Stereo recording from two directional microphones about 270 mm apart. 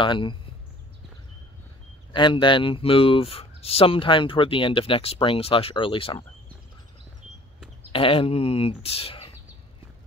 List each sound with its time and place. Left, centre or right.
0.0 s speech: centre
2.1 s speech: centre
7.9 s speech: centre